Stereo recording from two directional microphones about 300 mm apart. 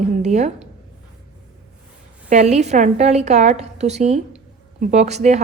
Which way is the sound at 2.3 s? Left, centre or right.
Right.